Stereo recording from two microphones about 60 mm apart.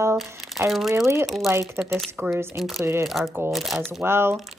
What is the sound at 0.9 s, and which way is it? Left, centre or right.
Speech, right.